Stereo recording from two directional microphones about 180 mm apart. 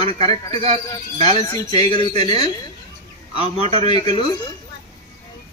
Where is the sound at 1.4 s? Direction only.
25° left (ahead or behind).